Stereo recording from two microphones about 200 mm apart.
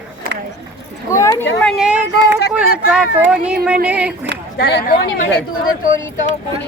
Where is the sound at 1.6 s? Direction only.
5° right (ahead or behind).